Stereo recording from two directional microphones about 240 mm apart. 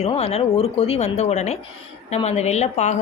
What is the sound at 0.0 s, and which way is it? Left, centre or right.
A woman's voice, left.